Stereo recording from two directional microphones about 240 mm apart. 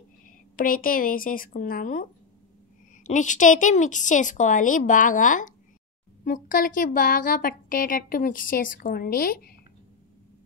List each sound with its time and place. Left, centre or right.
0.6 s a woman's voice: left